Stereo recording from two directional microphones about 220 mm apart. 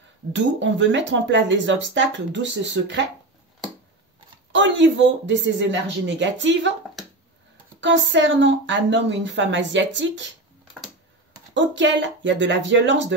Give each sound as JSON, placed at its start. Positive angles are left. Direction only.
{"t": 0.3, "sound": "speech", "side_deg": -55}
{"t": 4.5, "sound": "speech", "side_deg": -55}
{"t": 7.8, "sound": "speech", "side_deg": -55}
{"t": 11.5, "sound": "speech", "side_deg": -55}